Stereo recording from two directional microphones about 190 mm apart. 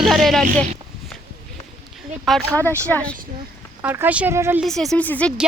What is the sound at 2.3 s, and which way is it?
Speech, 5° left (ahead or behind).